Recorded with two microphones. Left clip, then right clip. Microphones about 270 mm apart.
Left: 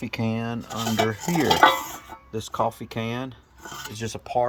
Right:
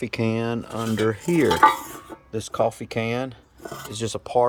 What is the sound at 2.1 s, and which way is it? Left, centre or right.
Filing, right.